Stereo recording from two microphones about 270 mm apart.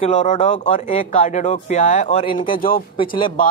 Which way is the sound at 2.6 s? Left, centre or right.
Left.